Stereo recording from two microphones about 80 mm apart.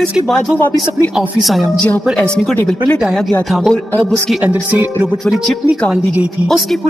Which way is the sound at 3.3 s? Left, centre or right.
Centre.